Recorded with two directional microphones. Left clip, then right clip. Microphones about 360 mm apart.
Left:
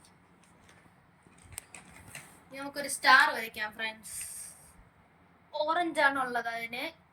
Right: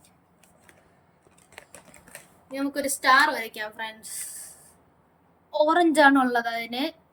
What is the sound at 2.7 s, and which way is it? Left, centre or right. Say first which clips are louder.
A woman's voice: right 3 dB; right.